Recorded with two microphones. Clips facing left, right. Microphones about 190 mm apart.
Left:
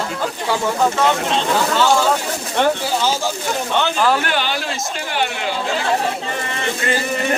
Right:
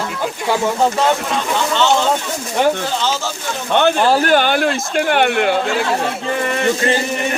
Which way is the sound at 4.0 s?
35° right (ahead or behind).